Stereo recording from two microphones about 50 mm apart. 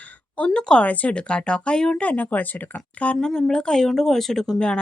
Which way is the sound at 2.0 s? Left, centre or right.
Left.